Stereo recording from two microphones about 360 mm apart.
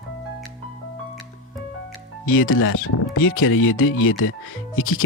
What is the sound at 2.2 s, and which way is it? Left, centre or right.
Speech, left.